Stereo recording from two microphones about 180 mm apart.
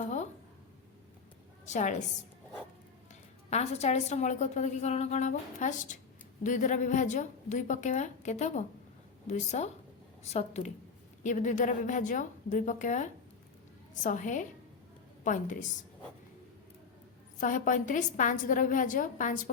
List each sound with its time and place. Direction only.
0.0 s a sound: 40° left (ahead or behind)
1.6 s a woman's voice: 40° left (ahead or behind)
3.5 s a woman's voice: 35° left (ahead or behind)
17.4 s a woman's voice: 45° left (ahead or behind)